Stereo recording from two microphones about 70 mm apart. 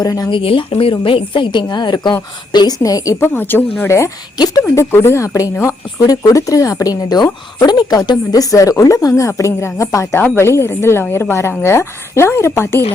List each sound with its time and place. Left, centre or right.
0.0 s speech: left
1.5 s a woman's voice: left
2.5 s speech: left
3.2 s speech: left
3.8 s speech: left
4.4 s a woman's voice: left
4.6 s speech: left
7.7 s speech: left
10.2 s speech: left
10.4 s speech: left